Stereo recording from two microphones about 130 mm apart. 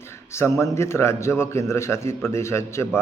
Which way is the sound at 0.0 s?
20° left (ahead or behind).